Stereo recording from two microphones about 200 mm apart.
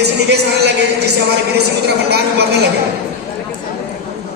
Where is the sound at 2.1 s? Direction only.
55° right (ahead or behind).